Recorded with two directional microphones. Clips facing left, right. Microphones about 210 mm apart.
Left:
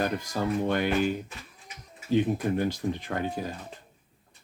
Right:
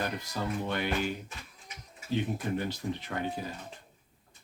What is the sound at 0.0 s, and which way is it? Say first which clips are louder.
Speech: left 6 dB; 45° left (ahead or behind).